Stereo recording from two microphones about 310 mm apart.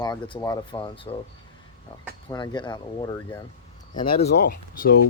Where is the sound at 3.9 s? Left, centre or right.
Left.